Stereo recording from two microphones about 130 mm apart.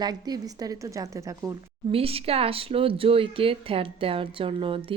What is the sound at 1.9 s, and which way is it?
Speech, 50° right (ahead or behind).